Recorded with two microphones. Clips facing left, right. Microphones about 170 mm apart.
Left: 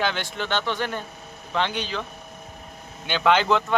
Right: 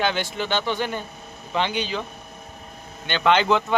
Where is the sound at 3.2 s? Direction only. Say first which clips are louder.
Right 1 dB; centre (ahead or behind).